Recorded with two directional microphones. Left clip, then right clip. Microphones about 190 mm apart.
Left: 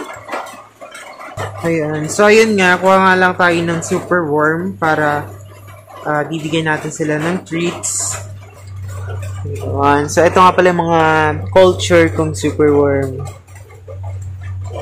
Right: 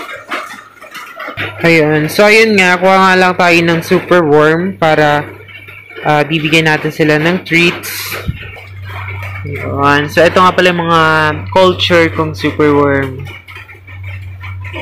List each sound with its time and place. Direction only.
1.7 s speech: 20° right (ahead or behind)
9.8 s speech: 10° right (ahead or behind)
12.6 s speech: 10° right (ahead or behind)